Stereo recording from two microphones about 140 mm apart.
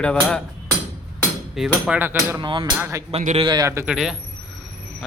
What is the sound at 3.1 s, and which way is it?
Speech, 45° right (ahead or behind).